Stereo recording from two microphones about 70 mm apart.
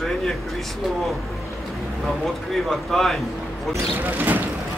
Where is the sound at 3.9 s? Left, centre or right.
Right.